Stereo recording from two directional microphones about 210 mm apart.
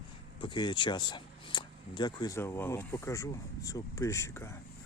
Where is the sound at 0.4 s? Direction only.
20° left (ahead or behind).